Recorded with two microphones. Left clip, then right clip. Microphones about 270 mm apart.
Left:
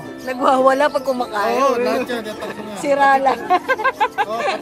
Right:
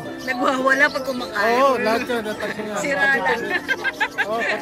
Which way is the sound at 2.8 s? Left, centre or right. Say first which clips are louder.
Left 5 dB; centre.